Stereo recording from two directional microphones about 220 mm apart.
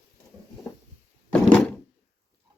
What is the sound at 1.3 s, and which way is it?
Door, 5° left (ahead or behind).